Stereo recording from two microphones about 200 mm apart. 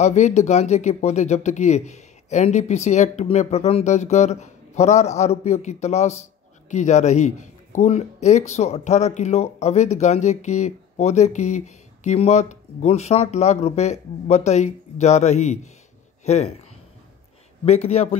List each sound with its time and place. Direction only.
0.0 s a man's voice: 35° left (ahead or behind)
17.6 s a man's voice: 30° left (ahead or behind)